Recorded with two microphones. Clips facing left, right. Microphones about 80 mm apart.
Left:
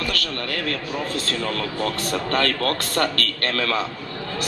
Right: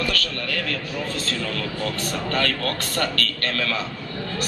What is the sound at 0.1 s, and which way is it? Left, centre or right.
A man's voice, left.